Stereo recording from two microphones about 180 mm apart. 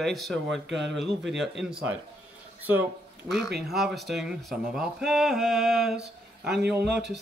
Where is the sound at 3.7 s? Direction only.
Centre (ahead or behind).